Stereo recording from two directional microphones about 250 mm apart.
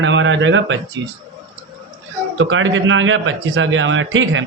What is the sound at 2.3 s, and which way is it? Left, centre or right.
A man's voice, right.